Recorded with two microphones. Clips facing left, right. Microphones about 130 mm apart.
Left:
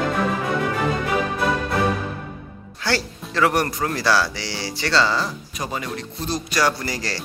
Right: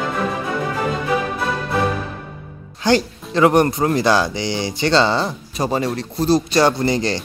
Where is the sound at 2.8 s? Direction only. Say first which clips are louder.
Right 8 dB; 20° right (ahead or behind).